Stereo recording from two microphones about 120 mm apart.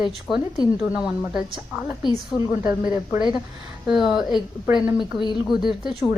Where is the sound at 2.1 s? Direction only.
35° left (ahead or behind).